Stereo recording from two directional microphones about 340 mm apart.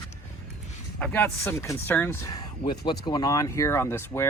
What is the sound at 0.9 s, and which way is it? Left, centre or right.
Speech, centre.